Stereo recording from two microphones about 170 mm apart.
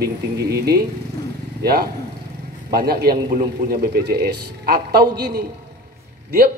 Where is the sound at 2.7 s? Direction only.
65° right (ahead or behind).